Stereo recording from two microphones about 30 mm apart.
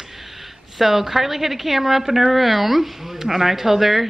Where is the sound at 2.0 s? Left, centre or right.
Centre.